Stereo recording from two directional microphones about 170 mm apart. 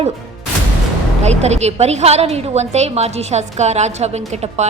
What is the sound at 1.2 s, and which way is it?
A woman's voice, 40° right (ahead or behind).